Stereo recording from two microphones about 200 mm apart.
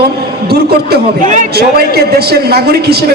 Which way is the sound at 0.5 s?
50° right (ahead or behind).